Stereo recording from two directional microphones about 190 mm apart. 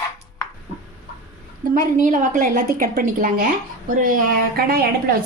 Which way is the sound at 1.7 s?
45° right (ahead or behind).